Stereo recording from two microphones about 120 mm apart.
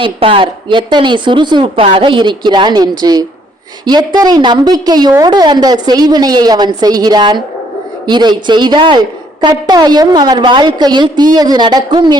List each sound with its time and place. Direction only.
0.0 s a woman's voice: 45° right (ahead or behind)